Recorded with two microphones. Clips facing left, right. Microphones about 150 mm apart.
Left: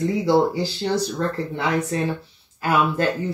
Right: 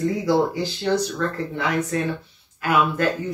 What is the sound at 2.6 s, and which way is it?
Speech, 35° left (ahead or behind).